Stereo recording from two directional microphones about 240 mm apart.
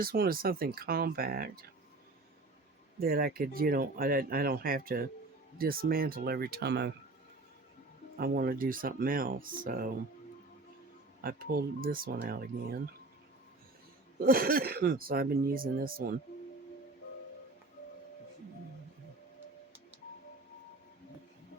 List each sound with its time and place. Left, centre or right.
0.0 s speech: right
3.0 s speech: right
8.2 s speech: right
11.2 s speech: right
14.2 s speech: right